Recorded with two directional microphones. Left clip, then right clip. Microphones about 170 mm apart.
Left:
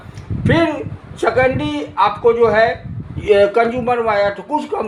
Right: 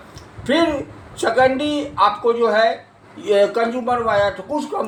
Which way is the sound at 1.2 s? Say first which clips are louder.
Left 1 dB; 45° left (ahead or behind).